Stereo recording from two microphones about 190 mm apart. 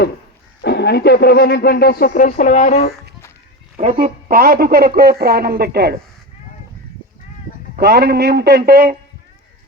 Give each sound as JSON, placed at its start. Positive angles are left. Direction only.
{"t": 0.6, "sound": "speech", "side_deg": 65}
{"t": 3.8, "sound": "speech", "side_deg": -40}
{"t": 7.8, "sound": "speech", "side_deg": -60}